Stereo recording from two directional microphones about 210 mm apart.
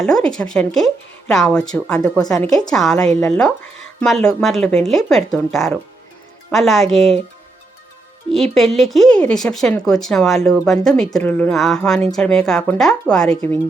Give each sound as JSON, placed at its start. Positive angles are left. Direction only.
{"t": 0.0, "sound": "speech", "side_deg": 5}
{"t": 2.0, "sound": "a woman's voice", "side_deg": 15}
{"t": 2.3, "sound": "speech", "side_deg": 0}
{"t": 8.3, "sound": "speech", "side_deg": 0}